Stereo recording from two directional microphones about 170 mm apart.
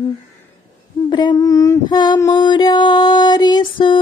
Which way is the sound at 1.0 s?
25° left (ahead or behind).